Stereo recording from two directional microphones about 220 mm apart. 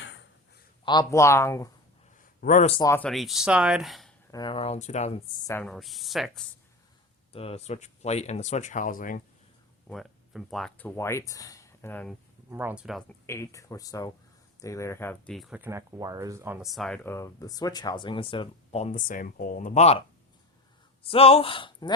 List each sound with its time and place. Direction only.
0.9 s speech: 15° left (ahead or behind)
2.4 s speech: 35° left (ahead or behind)
2.8 s speech: 10° left (ahead or behind)
3.1 s speech: centre (ahead or behind)
4.3 s speech: 20° left (ahead or behind)
5.5 s speech: 5° left (ahead or behind)
7.3 s speech: 25° left (ahead or behind)
9.9 s speech: centre (ahead or behind)
12.5 s speech: 10° right (ahead or behind)
13.2 s speech: 10° left (ahead or behind); by 20.0 s 30° left (ahead or behind)
21.0 s speech: 25° left (ahead or behind)